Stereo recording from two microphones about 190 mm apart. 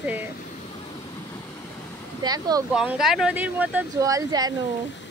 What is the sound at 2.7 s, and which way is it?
Speech, centre (ahead or behind).